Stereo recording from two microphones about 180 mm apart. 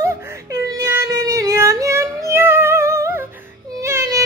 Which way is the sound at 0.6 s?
15° right (ahead or behind).